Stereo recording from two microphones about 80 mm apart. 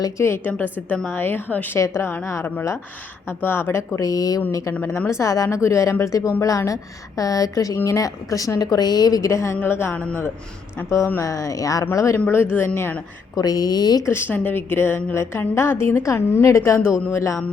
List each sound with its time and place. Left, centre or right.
0.4 s a woman's voice: left
1.8 s a woman's voice: left
4.8 s a woman's voice: left
9.6 s a woman's voice: left
12.1 s a woman's voice: left
13.3 s a woman's voice: left
14.0 s a woman's voice: left